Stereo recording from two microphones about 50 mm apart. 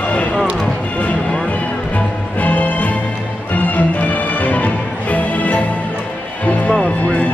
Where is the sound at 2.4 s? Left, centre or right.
Left.